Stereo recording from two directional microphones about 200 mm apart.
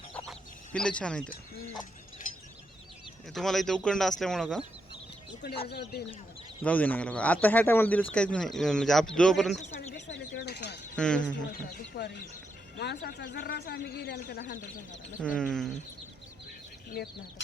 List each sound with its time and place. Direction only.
0.3 s chicken: 5° left (ahead or behind)
2.2 s mechanisms: 40° left (ahead or behind)
3.3 s speech: centre (ahead or behind)
5.6 s speech: 55° left (ahead or behind)
6.6 s speech: 5° left (ahead or behind)
10.1 s a sound: 60° left (ahead or behind)
10.9 s speech: 5° left (ahead or behind)
11.3 s a man's voice: 55° left (ahead or behind)
15.4 s speech: 5° left (ahead or behind)
16.9 s a man's voice: 50° left (ahead or behind)